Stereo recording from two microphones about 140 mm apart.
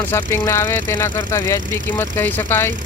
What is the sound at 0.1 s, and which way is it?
Speech, 20° left (ahead or behind).